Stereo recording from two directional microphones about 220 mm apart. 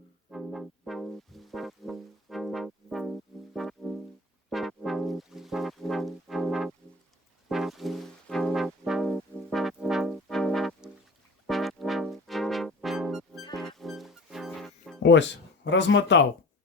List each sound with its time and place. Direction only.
0.3 s music: centre (ahead or behind)
7.4 s brass instrument: centre (ahead or behind)
11.4 s music: centre (ahead or behind)
15.0 s speech: 55° left (ahead or behind)